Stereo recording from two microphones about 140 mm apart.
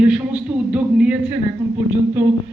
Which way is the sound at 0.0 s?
10° right (ahead or behind).